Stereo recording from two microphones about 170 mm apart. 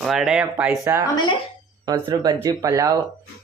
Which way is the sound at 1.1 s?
25° left (ahead or behind).